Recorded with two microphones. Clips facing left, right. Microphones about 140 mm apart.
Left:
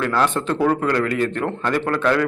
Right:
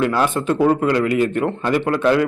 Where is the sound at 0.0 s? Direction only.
15° right (ahead or behind).